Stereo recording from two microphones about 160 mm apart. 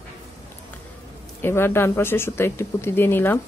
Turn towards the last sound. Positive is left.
turn(degrees=15)  # may be behind; listen again after turning